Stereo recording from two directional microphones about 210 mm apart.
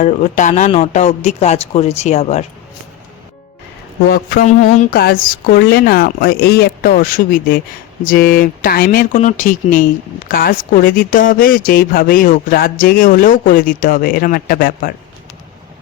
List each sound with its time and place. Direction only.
0.0 s speech: 35° left (ahead or behind)
4.1 s speech: 45° left (ahead or behind)